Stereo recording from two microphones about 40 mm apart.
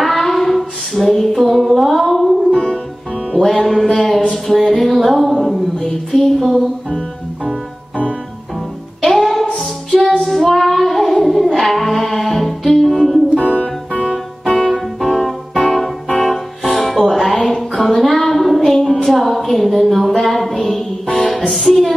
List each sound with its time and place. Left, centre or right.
0.0 s child singing: centre
1.3 s a sound: centre
2.5 s music: left
3.6 s music: centre
5.8 s a woman's voice: centre
6.4 s music: centre
9.1 s music: centre
10.2 s child singing: centre
11.2 s music: centre
17.4 s a sound: centre
21.1 s music: centre
21.4 s music: centre